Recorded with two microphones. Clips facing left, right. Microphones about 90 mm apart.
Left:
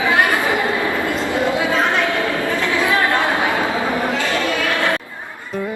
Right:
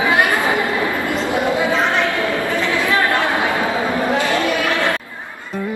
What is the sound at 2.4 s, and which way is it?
Chatter, 20° right (ahead or behind).